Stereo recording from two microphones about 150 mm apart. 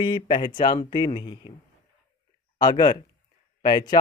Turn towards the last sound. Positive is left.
turn(degrees=25)  # may be behind; listen again after turning